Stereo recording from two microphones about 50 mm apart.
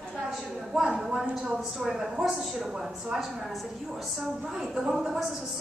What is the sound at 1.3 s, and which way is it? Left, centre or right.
A woman's voice, centre.